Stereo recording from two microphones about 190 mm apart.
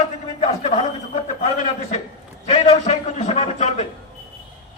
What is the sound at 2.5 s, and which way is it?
A man's voice, 35° left (ahead or behind).